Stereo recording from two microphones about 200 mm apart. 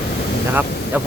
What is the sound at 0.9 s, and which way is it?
Speech, 10° right (ahead or behind).